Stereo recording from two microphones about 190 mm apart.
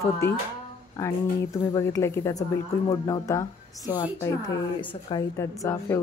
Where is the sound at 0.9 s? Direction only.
15° left (ahead or behind).